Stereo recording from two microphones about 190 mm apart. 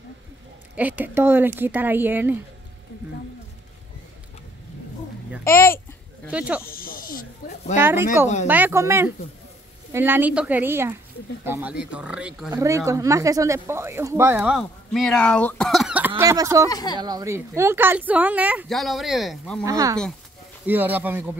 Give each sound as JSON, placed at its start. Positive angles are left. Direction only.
{"t": 0.7, "sound": "speech", "side_deg": -10}
{"t": 6.3, "sound": "speech", "side_deg": -5}
{"t": 6.7, "sound": "snake", "side_deg": 50}
{"t": 7.8, "sound": "speech", "side_deg": -10}
{"t": 14.6, "sound": "speech", "side_deg": 0}
{"t": 16.2, "sound": "speech", "side_deg": -15}
{"t": 16.6, "sound": "speech", "side_deg": 20}
{"t": 17.0, "sound": "speech", "side_deg": -20}
{"t": 19.6, "sound": "speech", "side_deg": -20}